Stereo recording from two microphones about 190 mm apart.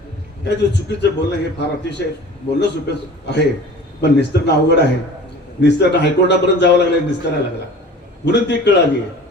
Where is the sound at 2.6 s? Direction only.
65° left (ahead or behind).